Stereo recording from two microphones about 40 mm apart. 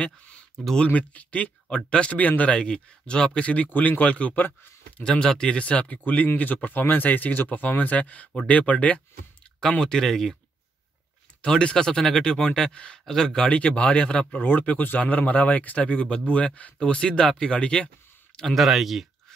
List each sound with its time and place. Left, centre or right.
0.0 s a sound: left
0.8 s speech: left
1.9 s speech: left
2.1 s speech: left
2.5 s speech: left
5.0 s speech: centre
5.6 s speech: left
5.9 s speech: left
9.6 s speech: centre
11.4 s speech: left
13.0 s speech: centre
13.4 s speech: left
14.4 s speech: left
18.4 s speech: centre